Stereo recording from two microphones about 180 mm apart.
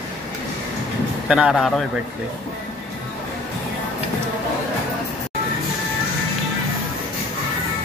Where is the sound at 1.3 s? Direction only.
5° right (ahead or behind).